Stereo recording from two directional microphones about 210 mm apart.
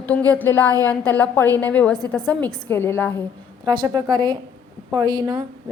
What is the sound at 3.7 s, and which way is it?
A woman's voice, 20° right (ahead or behind).